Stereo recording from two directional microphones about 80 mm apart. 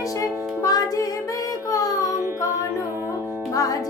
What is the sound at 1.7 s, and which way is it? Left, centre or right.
Child singing, left.